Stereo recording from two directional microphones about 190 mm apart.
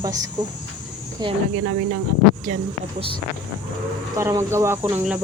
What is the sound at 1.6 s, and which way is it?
Speech, 90° right.